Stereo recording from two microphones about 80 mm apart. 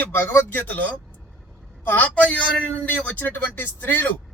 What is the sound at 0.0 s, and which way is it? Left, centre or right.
Speech, left.